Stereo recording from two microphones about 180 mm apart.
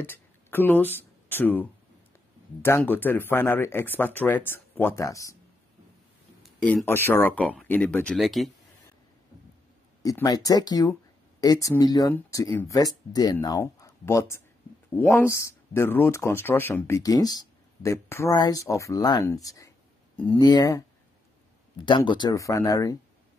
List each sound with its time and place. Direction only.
0.0 s speech: 10° left (ahead or behind)
6.4 s speech: 5° left (ahead or behind)
10.0 s speech: 20° left (ahead or behind)
21.8 s speech: 25° left (ahead or behind)